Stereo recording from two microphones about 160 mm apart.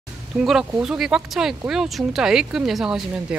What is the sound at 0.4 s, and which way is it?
Speech, 5° right (ahead or behind).